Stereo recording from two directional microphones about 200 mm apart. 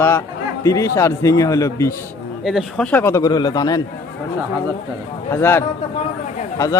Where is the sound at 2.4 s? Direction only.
Centre (ahead or behind); by 3.8 s 20° left (ahead or behind).